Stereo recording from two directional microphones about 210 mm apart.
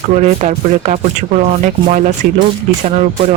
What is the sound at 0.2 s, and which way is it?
Speech, 35° right (ahead or behind).